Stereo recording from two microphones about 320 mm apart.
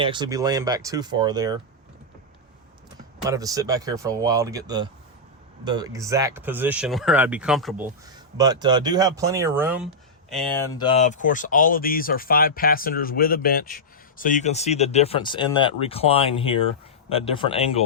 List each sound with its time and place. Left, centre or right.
0.0 s speech: centre
3.2 s speech: centre
8.0 s speech: centre
10.9 s speech: left